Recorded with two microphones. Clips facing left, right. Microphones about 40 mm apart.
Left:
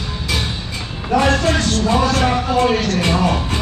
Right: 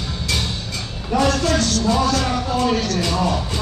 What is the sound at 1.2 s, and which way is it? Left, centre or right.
Speech, left.